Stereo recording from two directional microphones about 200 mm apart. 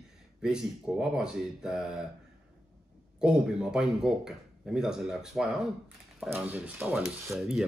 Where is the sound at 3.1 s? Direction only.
5° right (ahead or behind).